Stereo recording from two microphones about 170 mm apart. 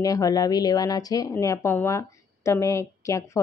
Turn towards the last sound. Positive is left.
turn(degrees=15)  # may be behind; listen again after turning